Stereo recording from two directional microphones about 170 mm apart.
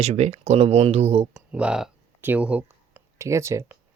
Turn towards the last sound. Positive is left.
turn(degrees=-15)  # may be behind; listen again after turning